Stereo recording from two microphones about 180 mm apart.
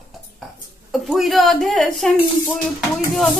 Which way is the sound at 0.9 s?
Centre (ahead or behind).